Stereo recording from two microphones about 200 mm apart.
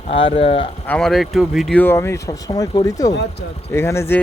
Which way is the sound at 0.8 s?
5° left (ahead or behind).